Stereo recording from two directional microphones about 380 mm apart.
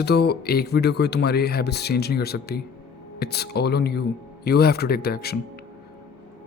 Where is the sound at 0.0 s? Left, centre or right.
Left.